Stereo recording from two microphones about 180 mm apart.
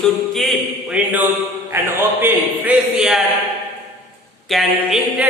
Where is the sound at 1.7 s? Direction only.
10° right (ahead or behind).